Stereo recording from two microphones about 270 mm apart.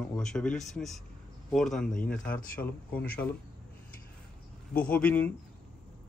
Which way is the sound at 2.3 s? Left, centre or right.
Left.